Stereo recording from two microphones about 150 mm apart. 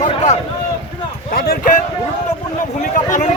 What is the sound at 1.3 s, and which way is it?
Speech, 90° left.